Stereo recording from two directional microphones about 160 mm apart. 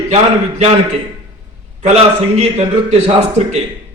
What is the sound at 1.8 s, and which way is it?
A man's voice, 40° right (ahead or behind).